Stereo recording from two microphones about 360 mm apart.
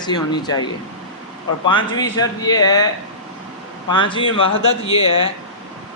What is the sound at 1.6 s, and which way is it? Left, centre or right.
A man's voice, centre.